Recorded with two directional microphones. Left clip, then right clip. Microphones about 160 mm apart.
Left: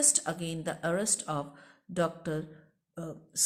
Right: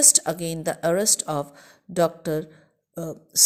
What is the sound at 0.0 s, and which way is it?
Speech, 40° right (ahead or behind).